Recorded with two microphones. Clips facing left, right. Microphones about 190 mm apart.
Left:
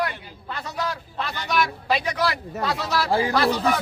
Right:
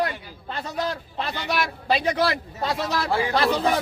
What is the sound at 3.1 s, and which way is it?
Speech, 35° left (ahead or behind).